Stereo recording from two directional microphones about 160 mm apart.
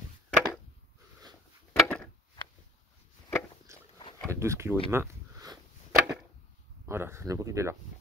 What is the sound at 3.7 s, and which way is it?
Dog, 15° right (ahead or behind).